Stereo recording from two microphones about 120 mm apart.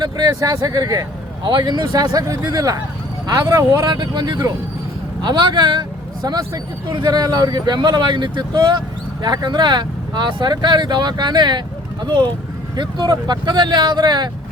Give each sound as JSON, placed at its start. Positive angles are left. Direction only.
{"t": 0.0, "sound": "speech", "side_deg": -35}